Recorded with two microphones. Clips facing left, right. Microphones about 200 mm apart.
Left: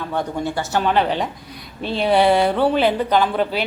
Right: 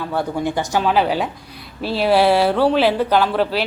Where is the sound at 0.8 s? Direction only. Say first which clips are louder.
Right 1 dB; 5° right (ahead or behind).